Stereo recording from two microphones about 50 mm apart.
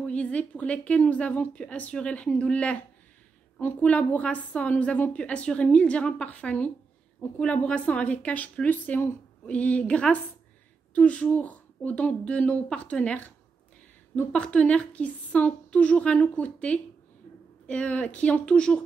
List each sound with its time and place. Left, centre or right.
0.0 s a woman's voice: left
5.1 s a woman's voice: left